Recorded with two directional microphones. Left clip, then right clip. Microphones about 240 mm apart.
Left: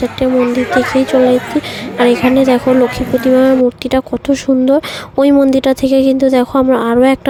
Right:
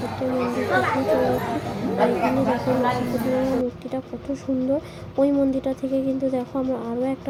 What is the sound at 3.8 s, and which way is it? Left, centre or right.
Speech, left.